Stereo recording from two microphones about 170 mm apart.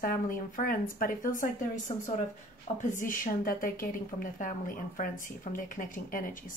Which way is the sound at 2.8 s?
50° left (ahead or behind).